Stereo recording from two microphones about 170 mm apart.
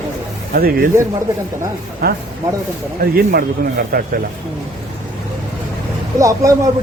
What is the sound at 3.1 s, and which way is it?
Speech, 60° right (ahead or behind).